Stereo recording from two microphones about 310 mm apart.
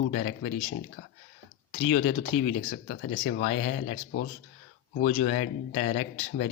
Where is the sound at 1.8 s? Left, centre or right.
Left.